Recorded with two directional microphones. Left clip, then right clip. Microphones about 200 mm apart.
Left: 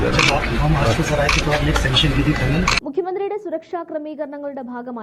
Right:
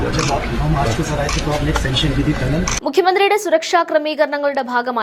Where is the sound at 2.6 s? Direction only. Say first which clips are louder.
Right 7 dB; 10° right (ahead or behind).